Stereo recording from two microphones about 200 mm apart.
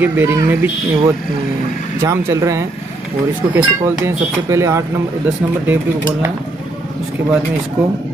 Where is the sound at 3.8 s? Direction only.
15° right (ahead or behind).